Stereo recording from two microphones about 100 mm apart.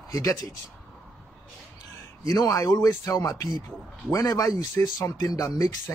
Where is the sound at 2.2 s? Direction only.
35° left (ahead or behind).